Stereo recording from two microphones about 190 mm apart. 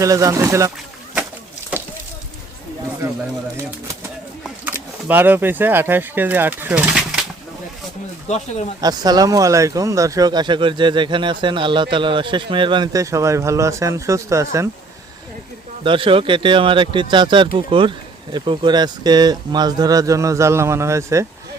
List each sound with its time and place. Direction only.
0.0 s speech: 15° right (ahead or behind)
4.4 s speech: 10° right (ahead or behind)
8.3 s speech: 35° left (ahead or behind)
8.8 s speech: 20° right (ahead or behind)
15.8 s speech: 25° right (ahead or behind)